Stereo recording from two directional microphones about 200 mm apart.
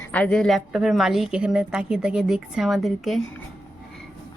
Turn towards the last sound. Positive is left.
turn(degrees=0)  # may be behind; listen again after turning